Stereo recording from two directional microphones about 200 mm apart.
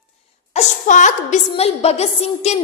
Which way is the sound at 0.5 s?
35° left (ahead or behind).